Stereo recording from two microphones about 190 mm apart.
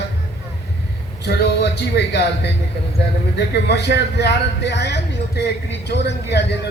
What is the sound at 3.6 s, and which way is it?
A man's voice, 60° left (ahead or behind).